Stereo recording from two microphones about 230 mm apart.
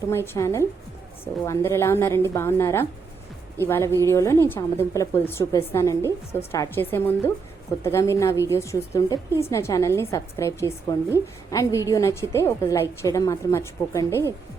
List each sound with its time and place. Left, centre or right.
0.3 s a woman's voice: centre